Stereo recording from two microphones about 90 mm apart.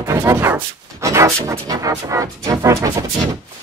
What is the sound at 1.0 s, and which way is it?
Music, 35° right (ahead or behind).